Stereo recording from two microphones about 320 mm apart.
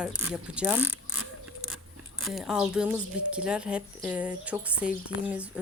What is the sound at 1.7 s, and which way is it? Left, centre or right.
Zipper, centre.